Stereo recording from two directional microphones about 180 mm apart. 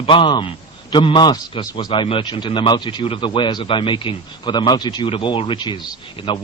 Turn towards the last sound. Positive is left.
turn(degrees=25)  # may be behind; listen again after turning